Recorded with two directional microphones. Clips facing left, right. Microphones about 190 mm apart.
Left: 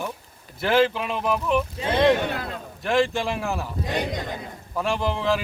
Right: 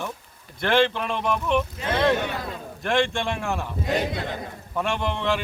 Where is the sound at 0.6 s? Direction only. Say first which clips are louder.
Left 1 dB; 5° left (ahead or behind).